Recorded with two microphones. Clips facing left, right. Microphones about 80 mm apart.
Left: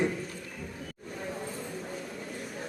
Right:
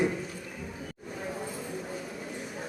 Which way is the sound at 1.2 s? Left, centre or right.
Centre.